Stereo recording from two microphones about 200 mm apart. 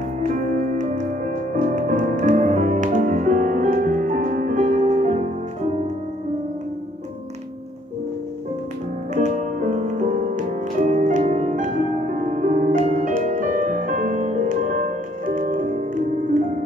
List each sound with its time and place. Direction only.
0.7 s music: 40° right (ahead or behind)
9.1 s music: 35° right (ahead or behind)